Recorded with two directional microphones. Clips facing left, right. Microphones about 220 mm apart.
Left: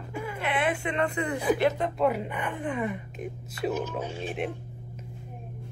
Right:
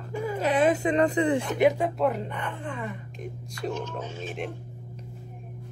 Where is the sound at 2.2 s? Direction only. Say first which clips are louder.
Left 2 dB; 10° left (ahead or behind).